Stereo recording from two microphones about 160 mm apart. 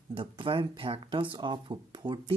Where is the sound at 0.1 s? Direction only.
35° right (ahead or behind).